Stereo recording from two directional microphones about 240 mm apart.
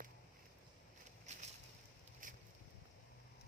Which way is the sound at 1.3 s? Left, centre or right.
Right.